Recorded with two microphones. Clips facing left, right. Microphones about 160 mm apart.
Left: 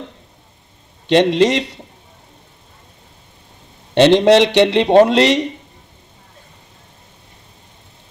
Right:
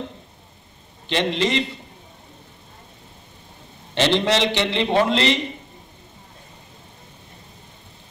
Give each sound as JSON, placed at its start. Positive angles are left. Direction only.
{"t": 1.0, "sound": "a man's voice", "side_deg": 70}
{"t": 3.9, "sound": "a man's voice", "side_deg": 65}